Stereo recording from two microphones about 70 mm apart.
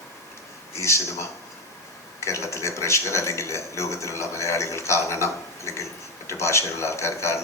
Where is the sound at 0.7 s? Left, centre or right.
Left.